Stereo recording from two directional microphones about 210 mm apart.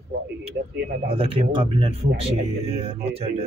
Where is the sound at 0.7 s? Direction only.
50° right (ahead or behind).